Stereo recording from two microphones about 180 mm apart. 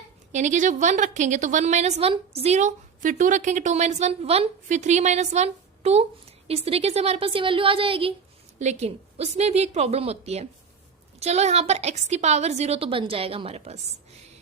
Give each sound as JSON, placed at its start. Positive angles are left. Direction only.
{"t": 0.3, "sound": "a woman's voice", "side_deg": -40}